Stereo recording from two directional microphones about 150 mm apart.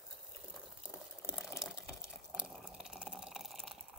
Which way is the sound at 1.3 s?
Centre (ahead or behind).